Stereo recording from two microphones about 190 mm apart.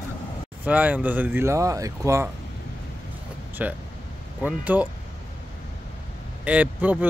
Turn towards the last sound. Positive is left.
turn(degrees=-10)  # may be behind; listen again after turning